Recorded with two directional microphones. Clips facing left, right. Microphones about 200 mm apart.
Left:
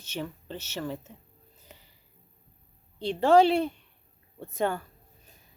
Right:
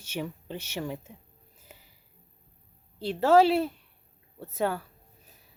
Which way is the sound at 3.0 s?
5° right (ahead or behind).